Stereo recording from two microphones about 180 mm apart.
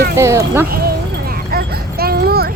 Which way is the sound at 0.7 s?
55° right (ahead or behind).